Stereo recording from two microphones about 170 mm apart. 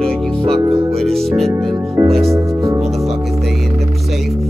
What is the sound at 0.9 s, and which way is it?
Music, centre (ahead or behind).